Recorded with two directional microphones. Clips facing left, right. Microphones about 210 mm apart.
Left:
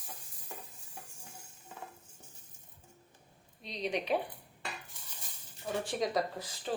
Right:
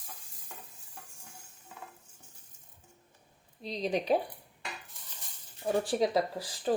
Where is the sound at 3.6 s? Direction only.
35° right (ahead or behind).